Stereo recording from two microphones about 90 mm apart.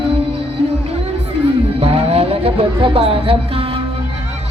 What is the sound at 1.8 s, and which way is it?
Music, 90° right.